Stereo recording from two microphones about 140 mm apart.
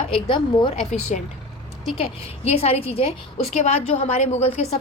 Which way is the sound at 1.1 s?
60° left (ahead or behind).